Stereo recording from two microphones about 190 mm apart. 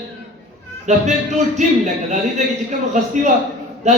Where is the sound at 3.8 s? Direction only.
35° right (ahead or behind).